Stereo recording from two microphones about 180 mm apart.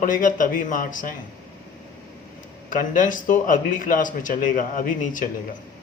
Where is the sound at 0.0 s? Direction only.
50° left (ahead or behind).